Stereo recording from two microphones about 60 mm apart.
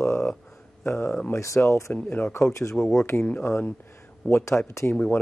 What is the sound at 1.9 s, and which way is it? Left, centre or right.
Speech, left.